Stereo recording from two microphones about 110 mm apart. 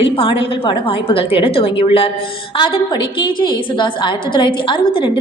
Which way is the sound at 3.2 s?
45° left (ahead or behind).